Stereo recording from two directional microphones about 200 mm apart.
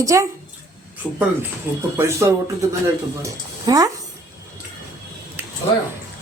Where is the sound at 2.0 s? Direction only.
15° right (ahead or behind).